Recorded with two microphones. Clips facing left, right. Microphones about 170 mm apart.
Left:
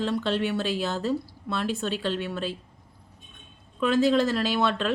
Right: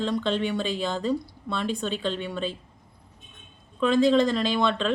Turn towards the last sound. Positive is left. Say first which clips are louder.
# right 1 dB
turn(degrees=5)  # may be behind; listen again after turning